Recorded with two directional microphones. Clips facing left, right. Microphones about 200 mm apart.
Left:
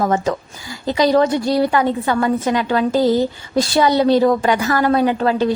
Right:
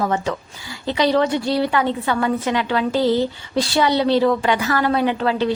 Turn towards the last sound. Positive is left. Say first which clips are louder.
# left 3 dB
turn(degrees=45)  # may be behind; listen again after turning